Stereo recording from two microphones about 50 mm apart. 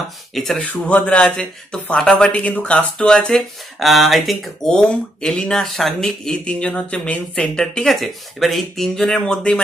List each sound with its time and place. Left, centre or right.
0.3 s speech: centre
0.6 s speech: left
3.8 s speech: centre
4.6 s speech: centre
6.3 s speech: left
7.5 s speech: centre